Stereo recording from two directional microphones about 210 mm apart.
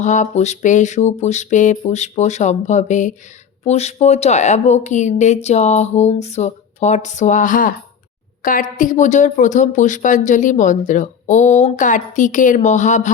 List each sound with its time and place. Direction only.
0.0 s speech: 35° left (ahead or behind)